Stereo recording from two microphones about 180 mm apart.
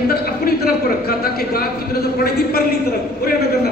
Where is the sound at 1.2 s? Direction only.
55° left (ahead or behind).